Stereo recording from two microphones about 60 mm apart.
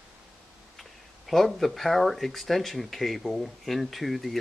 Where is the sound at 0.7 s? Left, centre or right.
Centre.